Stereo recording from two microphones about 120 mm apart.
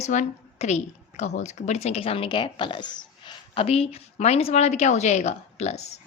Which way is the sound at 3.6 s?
55° left (ahead or behind).